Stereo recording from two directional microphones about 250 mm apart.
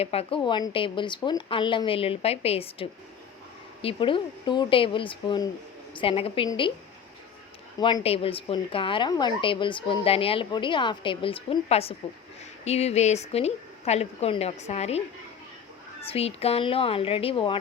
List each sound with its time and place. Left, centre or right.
0.0 s a woman's voice: left
7.8 s a woman's voice: centre
16.0 s a woman's voice: left